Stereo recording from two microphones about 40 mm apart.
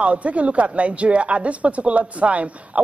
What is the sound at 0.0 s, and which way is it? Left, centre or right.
Speech, right.